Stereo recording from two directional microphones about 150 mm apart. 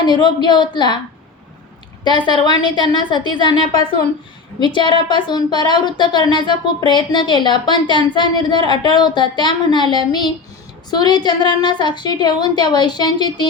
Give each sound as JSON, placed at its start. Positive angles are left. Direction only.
{"t": 0.0, "sound": "speech", "side_deg": 30}
{"t": 2.0, "sound": "a woman's voice", "side_deg": 30}